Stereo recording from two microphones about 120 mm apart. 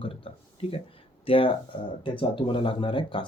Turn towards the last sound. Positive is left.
turn(degrees=45)  # may be behind; listen again after turning